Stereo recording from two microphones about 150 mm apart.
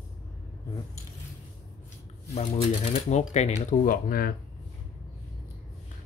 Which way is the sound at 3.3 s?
50° left (ahead or behind).